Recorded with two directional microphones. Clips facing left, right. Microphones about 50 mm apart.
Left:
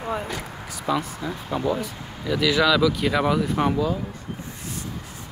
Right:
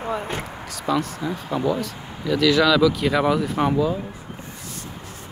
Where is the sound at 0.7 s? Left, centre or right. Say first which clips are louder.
Right 2 dB; centre.